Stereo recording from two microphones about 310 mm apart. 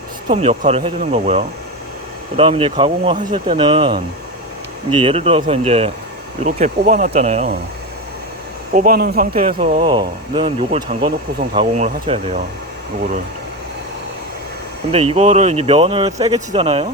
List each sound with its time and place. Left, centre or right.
0.3 s speech: right
8.7 s speech: right
9.8 s speech: centre
15.1 s speech: right